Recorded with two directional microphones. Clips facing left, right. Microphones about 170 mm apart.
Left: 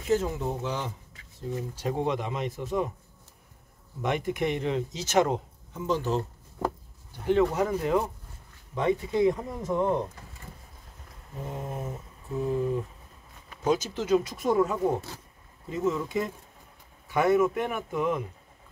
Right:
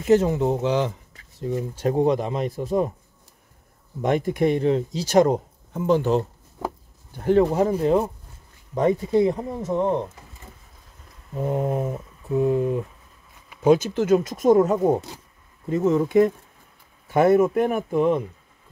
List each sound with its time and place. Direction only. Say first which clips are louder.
0.1 s speech: right 8 dB; 75° right (ahead or behind)
1.5 s speech: right 7 dB; 45° right (ahead or behind)
4.0 s speech: right 7 dB; 35° right (ahead or behind); by 6.2 s 60° right (ahead or behind)
7.2 s speech: right 5 dB; 45° right (ahead or behind)
7.4 s speech: right 6 dB; 30° right (ahead or behind)
11.3 s speech: right 12 dB; 65° right (ahead or behind)
13.7 s speech: right 8 dB; 55° right (ahead or behind); by 15.0 s 40° right (ahead or behind)
15.7 s speech: right 9 dB; 55° right (ahead or behind)
17.1 s speech: right 6 dB; 45° right (ahead or behind)